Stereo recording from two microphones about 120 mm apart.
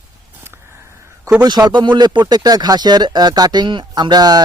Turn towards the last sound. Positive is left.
turn(degrees=-35)  # may be behind; listen again after turning